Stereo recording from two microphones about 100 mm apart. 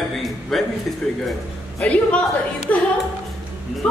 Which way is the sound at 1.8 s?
15° left (ahead or behind).